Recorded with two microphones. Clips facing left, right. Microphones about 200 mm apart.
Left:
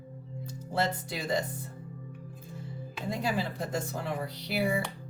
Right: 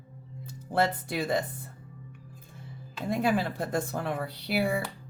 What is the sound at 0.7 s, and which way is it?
Speech, 55° right (ahead or behind).